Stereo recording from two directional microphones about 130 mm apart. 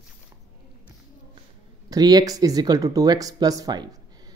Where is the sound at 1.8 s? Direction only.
30° right (ahead or behind).